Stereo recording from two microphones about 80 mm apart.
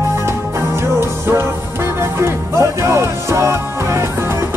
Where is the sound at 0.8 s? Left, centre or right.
Right.